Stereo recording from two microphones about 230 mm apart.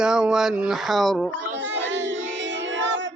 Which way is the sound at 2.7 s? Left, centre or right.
Right.